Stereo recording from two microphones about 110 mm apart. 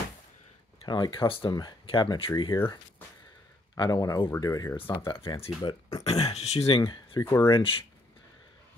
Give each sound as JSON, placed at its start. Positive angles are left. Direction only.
{"t": 0.8, "sound": "speech", "side_deg": 45}
{"t": 1.5, "sound": "speech", "side_deg": 40}
{"t": 3.7, "sound": "speech", "side_deg": 35}
{"t": 5.0, "sound": "speech", "side_deg": 50}
{"t": 5.6, "sound": "speech", "side_deg": 35}
{"t": 6.0, "sound": "speech", "side_deg": 70}
{"t": 6.9, "sound": "speech", "side_deg": 45}
{"t": 7.2, "sound": "speech", "side_deg": 25}